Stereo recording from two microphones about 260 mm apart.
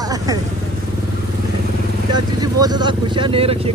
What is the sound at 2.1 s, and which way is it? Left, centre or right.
Speech, centre.